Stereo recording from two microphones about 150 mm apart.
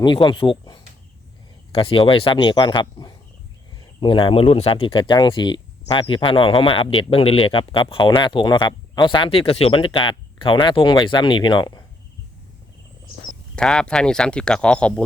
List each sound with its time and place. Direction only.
0.0 s speech: 30° left (ahead or behind)
13.6 s speech: 5° left (ahead or behind)